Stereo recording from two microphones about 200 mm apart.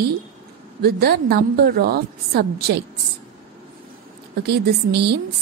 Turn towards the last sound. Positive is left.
turn(degrees=-55)  # may be behind; listen again after turning